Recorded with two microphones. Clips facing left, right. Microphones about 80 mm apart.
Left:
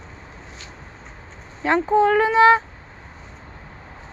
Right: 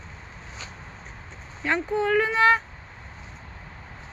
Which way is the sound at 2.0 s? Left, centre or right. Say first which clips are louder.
Left 3 dB; left.